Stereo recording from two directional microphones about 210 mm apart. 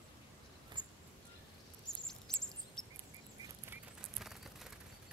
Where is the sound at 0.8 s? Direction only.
20° right (ahead or behind).